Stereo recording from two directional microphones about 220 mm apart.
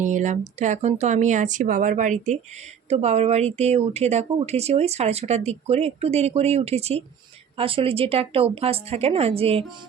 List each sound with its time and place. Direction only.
0.0 s speech: 35° right (ahead or behind)